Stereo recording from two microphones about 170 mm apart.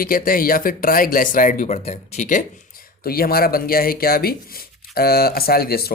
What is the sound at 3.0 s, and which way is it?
Speech, 60° left (ahead or behind).